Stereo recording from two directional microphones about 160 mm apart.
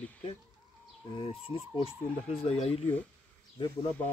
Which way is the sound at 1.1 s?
35° left (ahead or behind).